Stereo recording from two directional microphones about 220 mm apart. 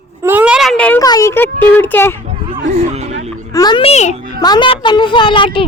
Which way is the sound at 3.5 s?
20° left (ahead or behind).